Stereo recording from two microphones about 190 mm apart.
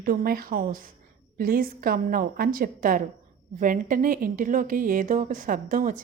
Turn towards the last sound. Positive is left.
turn(degrees=-45)  # may be behind; listen again after turning